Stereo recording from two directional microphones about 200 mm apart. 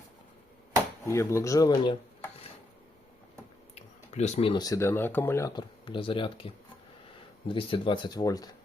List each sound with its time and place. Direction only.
1.0 s speech: 15° left (ahead or behind)
3.8 s speech: 35° left (ahead or behind); by 5.6 s 15° left (ahead or behind)
5.8 s speech: 25° left (ahead or behind)